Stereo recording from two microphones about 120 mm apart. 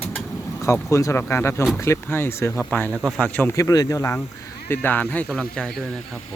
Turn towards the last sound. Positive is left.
turn(degrees=5)  # may be behind; listen again after turning